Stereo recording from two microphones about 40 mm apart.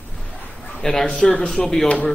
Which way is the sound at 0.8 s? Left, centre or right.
Centre.